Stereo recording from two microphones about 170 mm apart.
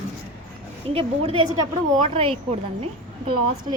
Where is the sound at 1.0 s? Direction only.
35° right (ahead or behind).